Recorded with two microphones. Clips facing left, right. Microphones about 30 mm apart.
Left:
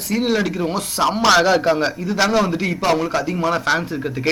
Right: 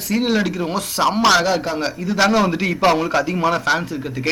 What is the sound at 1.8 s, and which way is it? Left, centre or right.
Speech, centre.